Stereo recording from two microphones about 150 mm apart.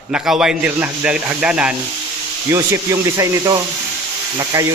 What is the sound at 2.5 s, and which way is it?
Speech, 20° right (ahead or behind).